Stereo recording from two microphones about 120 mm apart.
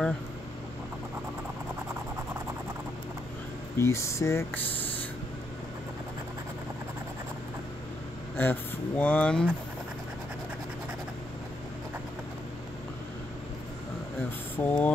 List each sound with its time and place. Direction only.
3.7 s speech: 25° left (ahead or behind)
8.4 s speech: 15° left (ahead or behind)
14.6 s speech: 10° left (ahead or behind)